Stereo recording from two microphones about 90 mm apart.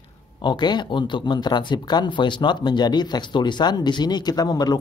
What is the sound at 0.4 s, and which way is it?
Speech, 55° left (ahead or behind).